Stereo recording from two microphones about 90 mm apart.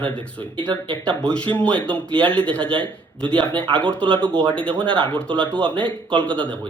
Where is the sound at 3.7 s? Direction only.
15° left (ahead or behind).